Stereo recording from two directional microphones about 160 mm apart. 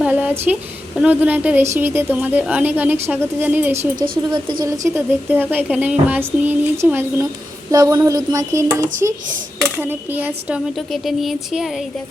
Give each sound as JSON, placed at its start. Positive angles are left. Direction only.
{"t": 0.0, "sound": "a woman's voice", "side_deg": -10}
{"t": 7.7, "sound": "a sound", "side_deg": -20}
{"t": 9.7, "sound": "a woman's voice", "side_deg": -10}
{"t": 10.8, "sound": "speech", "side_deg": 0}